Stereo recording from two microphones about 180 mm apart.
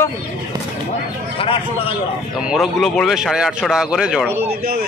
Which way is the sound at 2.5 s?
Centre (ahead or behind).